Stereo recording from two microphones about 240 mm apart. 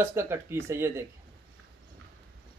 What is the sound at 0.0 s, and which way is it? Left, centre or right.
Speech, centre.